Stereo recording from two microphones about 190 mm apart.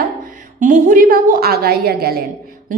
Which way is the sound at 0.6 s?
45° right (ahead or behind).